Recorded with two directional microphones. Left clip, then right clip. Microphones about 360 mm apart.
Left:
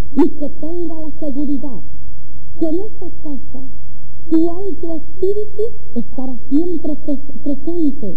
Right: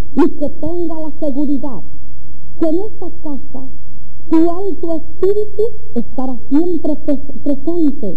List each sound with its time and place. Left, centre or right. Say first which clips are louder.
0.2 s speech: right 2 dB; left